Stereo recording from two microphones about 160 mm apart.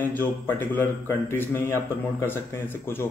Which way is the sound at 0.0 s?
10° left (ahead or behind).